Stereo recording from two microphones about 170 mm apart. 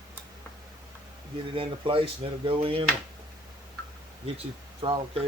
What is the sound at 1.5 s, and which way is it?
Speech, 30° right (ahead or behind).